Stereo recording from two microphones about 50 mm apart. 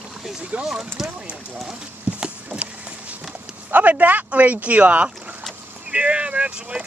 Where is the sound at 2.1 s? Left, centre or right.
Right.